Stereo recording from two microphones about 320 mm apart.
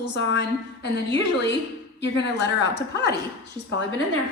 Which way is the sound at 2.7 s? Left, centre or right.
Left.